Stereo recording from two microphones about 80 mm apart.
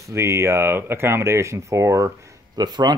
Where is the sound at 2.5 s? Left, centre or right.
Right.